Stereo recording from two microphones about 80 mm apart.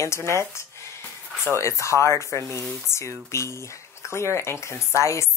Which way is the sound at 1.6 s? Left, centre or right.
Left.